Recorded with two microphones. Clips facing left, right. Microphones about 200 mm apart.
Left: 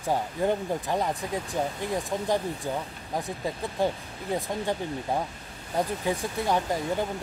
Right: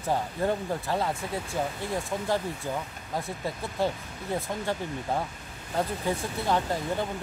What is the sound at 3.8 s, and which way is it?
Speech, 15° left (ahead or behind).